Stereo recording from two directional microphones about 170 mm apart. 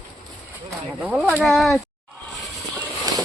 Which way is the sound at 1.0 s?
10° right (ahead or behind).